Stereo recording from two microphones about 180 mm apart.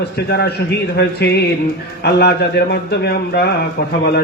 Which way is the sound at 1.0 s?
65° left (ahead or behind).